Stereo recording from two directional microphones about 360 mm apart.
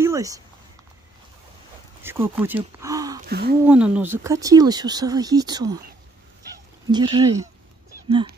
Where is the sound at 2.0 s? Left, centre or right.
Centre.